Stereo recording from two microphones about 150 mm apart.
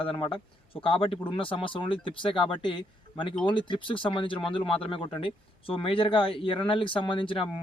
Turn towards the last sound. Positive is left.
turn(degrees=35)  # may be behind; listen again after turning